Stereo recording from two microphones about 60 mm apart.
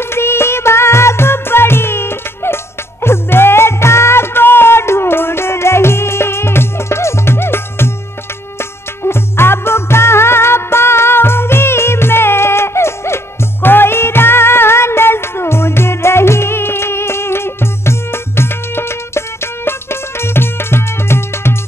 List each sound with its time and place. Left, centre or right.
0.0 s music: left